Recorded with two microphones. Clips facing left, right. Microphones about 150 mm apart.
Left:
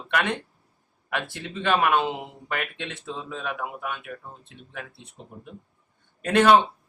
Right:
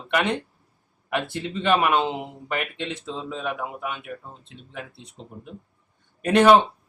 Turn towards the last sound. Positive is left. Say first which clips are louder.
# right 3 dB
turn(degrees=-15)  # may be behind; listen again after turning